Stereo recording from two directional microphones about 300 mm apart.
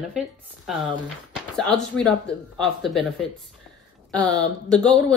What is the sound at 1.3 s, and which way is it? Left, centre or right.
Speech, centre.